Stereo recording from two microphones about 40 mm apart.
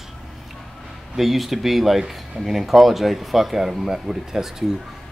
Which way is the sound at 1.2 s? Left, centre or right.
Centre.